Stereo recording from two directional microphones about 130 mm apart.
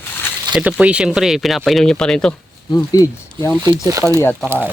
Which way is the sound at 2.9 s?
30° left (ahead or behind).